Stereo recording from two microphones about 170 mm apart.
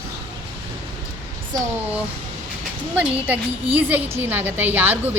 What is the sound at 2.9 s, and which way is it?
A woman's voice, 10° right (ahead or behind).